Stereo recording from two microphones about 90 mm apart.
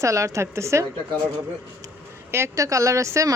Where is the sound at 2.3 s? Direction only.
30° right (ahead or behind).